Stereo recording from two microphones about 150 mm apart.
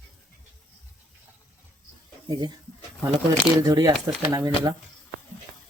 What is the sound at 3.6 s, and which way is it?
Speech, 20° right (ahead or behind).